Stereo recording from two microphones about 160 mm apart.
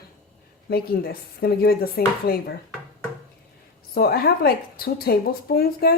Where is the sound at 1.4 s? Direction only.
75° left (ahead or behind).